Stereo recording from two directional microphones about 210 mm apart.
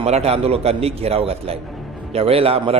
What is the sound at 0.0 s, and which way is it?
A man's voice, 30° right (ahead or behind).